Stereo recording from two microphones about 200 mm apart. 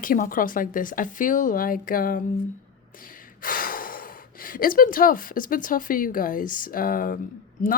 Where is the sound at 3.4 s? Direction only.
45° left (ahead or behind).